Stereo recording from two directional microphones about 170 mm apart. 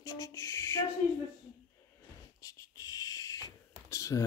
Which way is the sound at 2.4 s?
20° left (ahead or behind).